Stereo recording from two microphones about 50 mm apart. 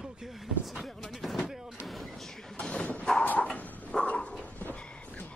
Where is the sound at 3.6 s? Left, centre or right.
Left.